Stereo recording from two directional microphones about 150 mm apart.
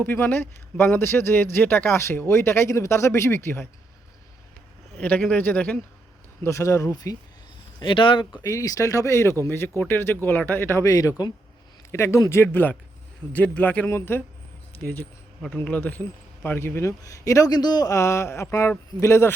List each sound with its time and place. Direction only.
0.0 s speech: 15° left (ahead or behind)
4.9 s a man's voice: 10° left (ahead or behind)
7.8 s speech: 35° left (ahead or behind)
8.4 s speech: 25° left (ahead or behind)
15.5 s a man's voice: 10° left (ahead or behind)